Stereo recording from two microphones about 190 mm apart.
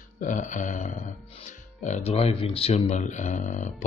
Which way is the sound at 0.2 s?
40° left (ahead or behind).